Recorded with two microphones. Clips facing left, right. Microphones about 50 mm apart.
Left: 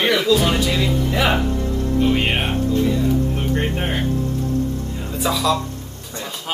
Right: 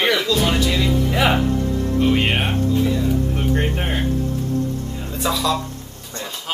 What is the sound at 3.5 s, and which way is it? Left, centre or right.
Speech, centre.